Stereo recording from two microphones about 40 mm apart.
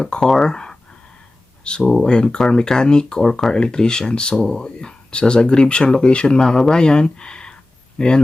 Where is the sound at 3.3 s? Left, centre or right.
Centre.